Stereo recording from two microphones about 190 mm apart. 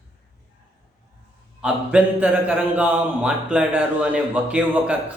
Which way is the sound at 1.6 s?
5° right (ahead or behind).